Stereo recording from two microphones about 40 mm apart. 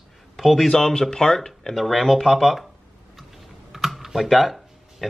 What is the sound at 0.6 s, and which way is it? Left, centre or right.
Speech, centre.